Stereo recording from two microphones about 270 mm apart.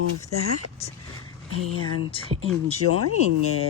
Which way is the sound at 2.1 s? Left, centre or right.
Left.